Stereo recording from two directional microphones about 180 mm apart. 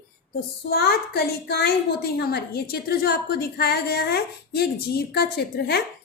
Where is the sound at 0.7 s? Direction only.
65° left (ahead or behind).